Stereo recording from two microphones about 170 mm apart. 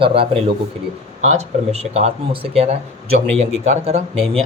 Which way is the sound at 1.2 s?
40° right (ahead or behind).